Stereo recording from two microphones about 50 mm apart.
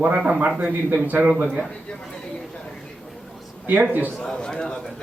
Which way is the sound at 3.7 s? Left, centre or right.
Right.